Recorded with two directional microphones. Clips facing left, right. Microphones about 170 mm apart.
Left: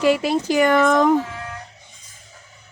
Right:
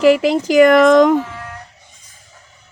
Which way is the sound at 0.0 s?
90° right.